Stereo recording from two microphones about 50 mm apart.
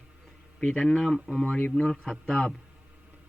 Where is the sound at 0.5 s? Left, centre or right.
Centre.